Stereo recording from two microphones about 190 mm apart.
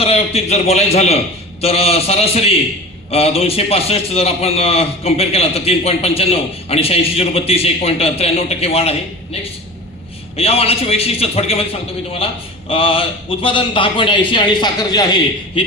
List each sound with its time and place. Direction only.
0.0 s a man's voice: 30° left (ahead or behind)
10.3 s a man's voice: 30° left (ahead or behind)